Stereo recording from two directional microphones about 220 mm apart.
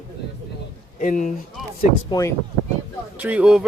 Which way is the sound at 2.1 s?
15° left (ahead or behind).